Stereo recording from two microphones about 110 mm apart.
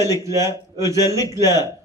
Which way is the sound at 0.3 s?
25° right (ahead or behind).